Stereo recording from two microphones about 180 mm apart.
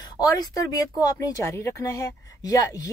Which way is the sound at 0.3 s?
20° left (ahead or behind).